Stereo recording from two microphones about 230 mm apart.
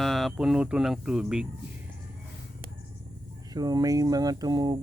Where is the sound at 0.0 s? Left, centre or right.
Centre.